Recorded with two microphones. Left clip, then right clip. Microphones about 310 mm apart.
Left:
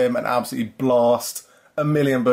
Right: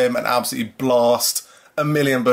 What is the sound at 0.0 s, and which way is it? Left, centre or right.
Speech, centre.